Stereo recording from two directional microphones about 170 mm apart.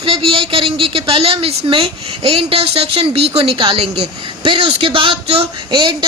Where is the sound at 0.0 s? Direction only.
30° right (ahead or behind).